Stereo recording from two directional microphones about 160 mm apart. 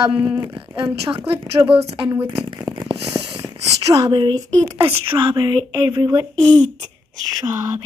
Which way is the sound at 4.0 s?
30° right (ahead or behind).